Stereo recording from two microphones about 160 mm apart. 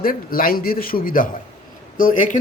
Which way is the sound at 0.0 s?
65° left (ahead or behind).